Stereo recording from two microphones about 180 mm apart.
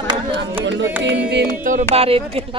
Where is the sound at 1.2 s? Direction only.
70° right (ahead or behind).